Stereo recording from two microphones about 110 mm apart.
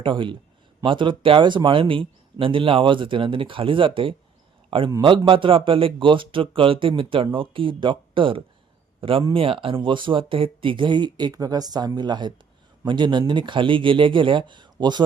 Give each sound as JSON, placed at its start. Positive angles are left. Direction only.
{"t": 0.0, "sound": "a man's voice", "side_deg": -50}